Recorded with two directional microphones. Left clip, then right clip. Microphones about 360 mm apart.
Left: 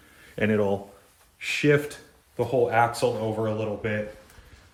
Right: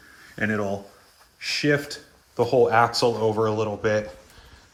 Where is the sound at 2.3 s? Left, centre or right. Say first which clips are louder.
Right 4 dB; centre.